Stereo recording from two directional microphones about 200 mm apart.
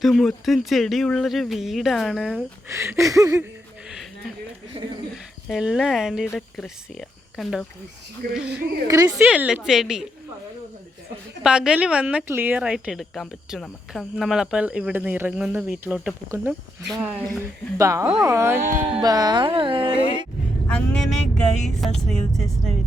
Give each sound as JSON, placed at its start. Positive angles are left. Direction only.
{"t": 0.0, "sound": "speech", "side_deg": 0}
{"t": 2.6, "sound": "a sound", "side_deg": -15}
{"t": 4.7, "sound": "speech", "side_deg": -25}
{"t": 5.1, "sound": "speech", "side_deg": 0}
{"t": 8.4, "sound": "a woman's voice", "side_deg": -50}
{"t": 8.9, "sound": "a sound", "side_deg": -20}
{"t": 9.1, "sound": "speech", "side_deg": -5}
{"t": 11.4, "sound": "speech", "side_deg": -5}
{"t": 16.9, "sound": "a sound", "side_deg": -5}
{"t": 18.7, "sound": "speech", "side_deg": -35}
{"t": 20.7, "sound": "speech", "side_deg": 5}